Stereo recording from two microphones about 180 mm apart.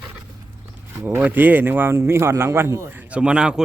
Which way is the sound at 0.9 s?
10° right (ahead or behind).